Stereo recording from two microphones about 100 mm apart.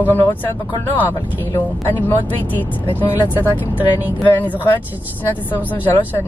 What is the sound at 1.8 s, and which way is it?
A woman's voice, 20° left (ahead or behind).